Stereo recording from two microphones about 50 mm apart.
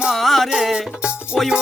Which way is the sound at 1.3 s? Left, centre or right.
Left.